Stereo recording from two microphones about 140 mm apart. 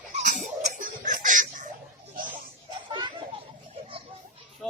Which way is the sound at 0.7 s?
70° right (ahead or behind).